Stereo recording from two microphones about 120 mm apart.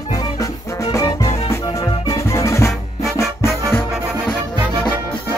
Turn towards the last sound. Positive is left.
turn(degrees=25)  # may be behind; listen again after turning